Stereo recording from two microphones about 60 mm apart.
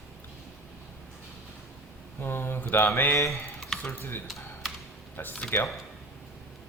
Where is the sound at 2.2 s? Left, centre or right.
Left.